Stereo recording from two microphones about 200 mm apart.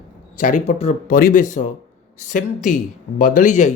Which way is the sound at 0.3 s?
40° left (ahead or behind).